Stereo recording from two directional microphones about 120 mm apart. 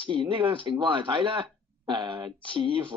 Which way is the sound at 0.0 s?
45° right (ahead or behind).